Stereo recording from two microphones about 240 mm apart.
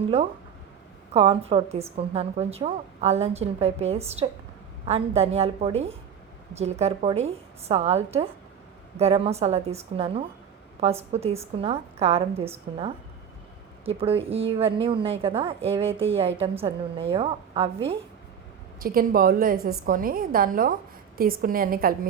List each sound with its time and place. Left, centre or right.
1.1 s a woman's voice: right
18.8 s a woman's voice: right